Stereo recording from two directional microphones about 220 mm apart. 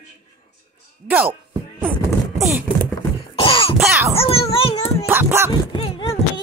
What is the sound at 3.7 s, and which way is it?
Music, centre (ahead or behind).